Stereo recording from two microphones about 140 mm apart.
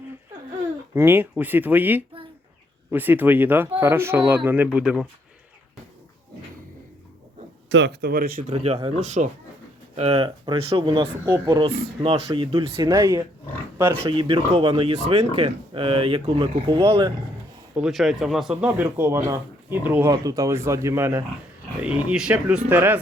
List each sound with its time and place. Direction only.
0.9 s speech: 15° right (ahead or behind)
8.1 s speech: 90° right
8.5 s speech: 45° right (ahead or behind)
9.9 s speech: 45° right (ahead or behind)
12.7 s speech: 25° right (ahead or behind)
14.1 s speech: 40° right (ahead or behind)
17.7 s speech: 5° right (ahead or behind)
18.6 s speech: 15° right (ahead or behind)
20.1 s speech: 25° right (ahead or behind)
21.8 s speech: 10° right (ahead or behind)